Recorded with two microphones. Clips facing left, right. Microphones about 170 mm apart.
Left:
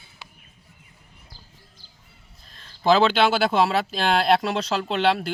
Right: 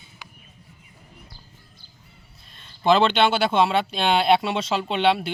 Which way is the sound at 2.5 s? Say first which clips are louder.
Even; centre (ahead or behind).